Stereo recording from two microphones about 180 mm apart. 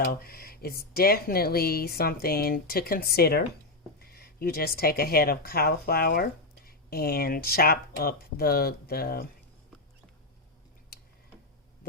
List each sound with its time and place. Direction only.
0.0 s speech: 55° left (ahead or behind)